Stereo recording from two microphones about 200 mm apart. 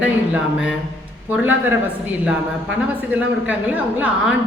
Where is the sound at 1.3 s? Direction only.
10° right (ahead or behind).